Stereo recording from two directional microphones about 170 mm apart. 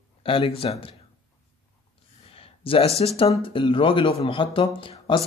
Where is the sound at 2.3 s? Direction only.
35° left (ahead or behind).